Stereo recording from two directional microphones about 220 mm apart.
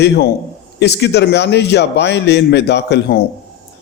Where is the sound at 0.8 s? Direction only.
50° left (ahead or behind).